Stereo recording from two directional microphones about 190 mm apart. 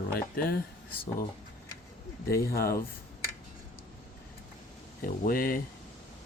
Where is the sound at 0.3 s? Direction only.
50° left (ahead or behind).